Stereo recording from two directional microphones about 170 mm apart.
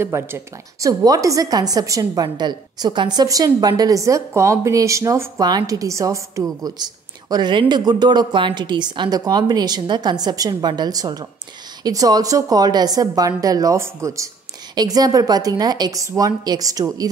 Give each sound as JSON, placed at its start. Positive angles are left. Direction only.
{"t": 0.0, "sound": "a woman's voice", "side_deg": -15}